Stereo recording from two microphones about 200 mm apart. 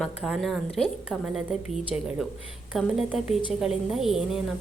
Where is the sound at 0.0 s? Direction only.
Centre (ahead or behind).